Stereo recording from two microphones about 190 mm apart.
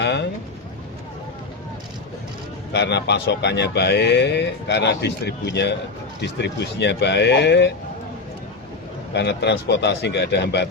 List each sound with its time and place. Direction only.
0.0 s a sound: 65° left (ahead or behind)
2.7 s speech: 65° left (ahead or behind)
9.1 s speech: 65° left (ahead or behind)